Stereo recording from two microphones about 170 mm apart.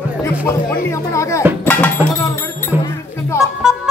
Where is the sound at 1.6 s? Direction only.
10° left (ahead or behind).